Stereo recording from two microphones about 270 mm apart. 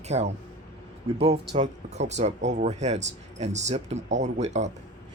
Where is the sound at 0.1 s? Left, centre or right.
Right.